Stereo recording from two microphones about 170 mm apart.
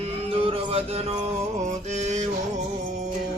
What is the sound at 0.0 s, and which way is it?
Music, 35° right (ahead or behind).